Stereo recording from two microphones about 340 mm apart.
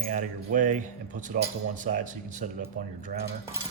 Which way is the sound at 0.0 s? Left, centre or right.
Right.